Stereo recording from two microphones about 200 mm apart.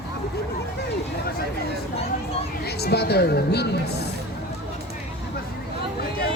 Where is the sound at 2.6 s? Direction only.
55° left (ahead or behind).